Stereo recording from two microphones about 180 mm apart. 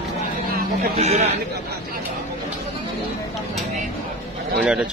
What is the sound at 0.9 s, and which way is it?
Speech, 35° right (ahead or behind).